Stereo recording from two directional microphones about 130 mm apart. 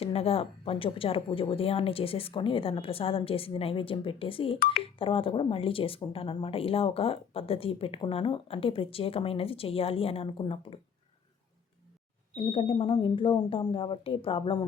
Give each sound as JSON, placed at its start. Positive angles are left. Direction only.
{"t": 0.0, "sound": "a woman's voice", "side_deg": 50}
{"t": 12.4, "sound": "a woman's voice", "side_deg": 45}